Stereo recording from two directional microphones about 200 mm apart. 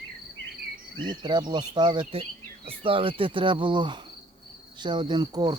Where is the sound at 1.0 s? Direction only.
25° right (ahead or behind).